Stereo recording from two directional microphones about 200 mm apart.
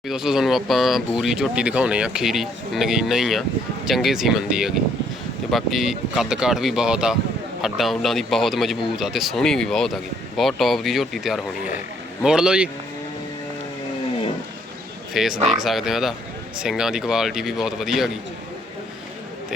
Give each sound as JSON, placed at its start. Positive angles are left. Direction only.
{"t": 0.1, "sound": "speech", "side_deg": 0}
{"t": 15.1, "sound": "speech", "side_deg": 0}